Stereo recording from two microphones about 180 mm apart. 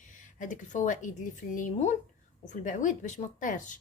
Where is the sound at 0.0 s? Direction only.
45° left (ahead or behind).